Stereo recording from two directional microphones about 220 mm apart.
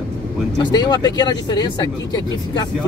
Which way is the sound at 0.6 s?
20° left (ahead or behind).